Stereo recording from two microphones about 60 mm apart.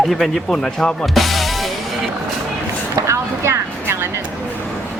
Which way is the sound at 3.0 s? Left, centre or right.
Right.